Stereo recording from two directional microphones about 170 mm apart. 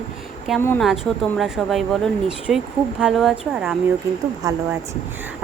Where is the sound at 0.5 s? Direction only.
10° left (ahead or behind); by 3.8 s 5° right (ahead or behind).